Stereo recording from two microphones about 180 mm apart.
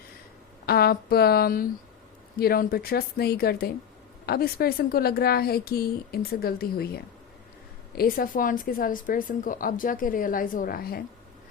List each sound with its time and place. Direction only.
0.6 s a woman's voice: 60° left (ahead or behind)